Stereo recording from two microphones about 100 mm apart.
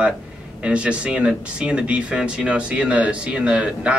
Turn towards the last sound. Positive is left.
turn(degrees=-10)  # may be behind; listen again after turning